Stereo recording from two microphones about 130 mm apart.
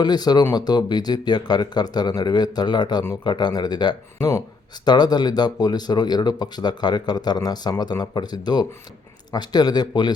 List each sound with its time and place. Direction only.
0.0 s speech: 35° left (ahead or behind)